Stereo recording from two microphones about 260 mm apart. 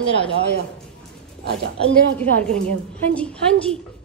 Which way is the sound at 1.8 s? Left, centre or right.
Centre.